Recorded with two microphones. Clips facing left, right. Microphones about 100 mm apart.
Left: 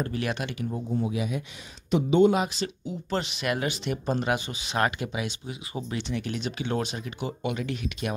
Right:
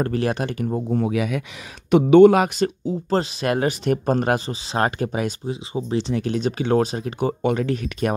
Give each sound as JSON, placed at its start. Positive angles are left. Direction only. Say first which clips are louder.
{"t": 0.2, "sound": "speech", "louder": "right 7 dB", "side_deg": -40}
{"t": 0.9, "sound": "speech", "louder": "right 6 dB", "side_deg": -70}
{"t": 4.7, "sound": "speech", "louder": "right 5 dB", "side_deg": -35}
{"t": 5.5, "sound": "speech", "louder": "right 9 dB", "side_deg": -30}